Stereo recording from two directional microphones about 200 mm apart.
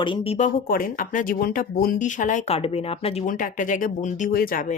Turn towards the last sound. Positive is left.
turn(degrees=45)  # may be behind; listen again after turning